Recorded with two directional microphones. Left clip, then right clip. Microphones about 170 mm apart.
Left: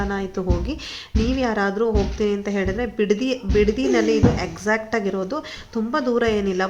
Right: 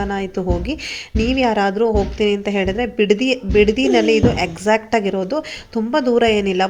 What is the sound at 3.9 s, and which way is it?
Speech, 25° right (ahead or behind).